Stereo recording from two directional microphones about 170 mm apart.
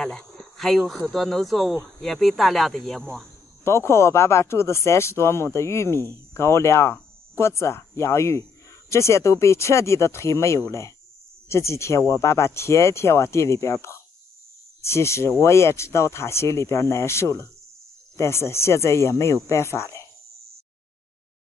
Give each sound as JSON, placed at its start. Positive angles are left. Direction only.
{"t": 0.0, "sound": "speech", "side_deg": 0}
{"t": 3.6, "sound": "speech", "side_deg": 15}